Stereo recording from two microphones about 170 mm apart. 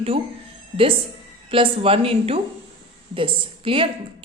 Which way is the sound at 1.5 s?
30° right (ahead or behind).